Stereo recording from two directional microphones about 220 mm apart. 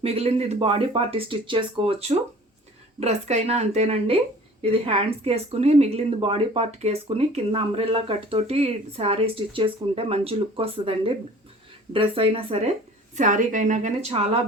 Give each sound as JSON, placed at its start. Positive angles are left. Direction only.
{"t": 0.0, "sound": "a woman's voice", "side_deg": -25}